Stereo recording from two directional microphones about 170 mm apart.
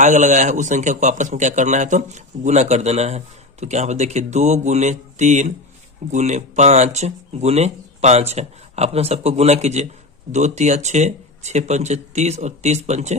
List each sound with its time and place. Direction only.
0.0 s a man's voice: 45° right (ahead or behind)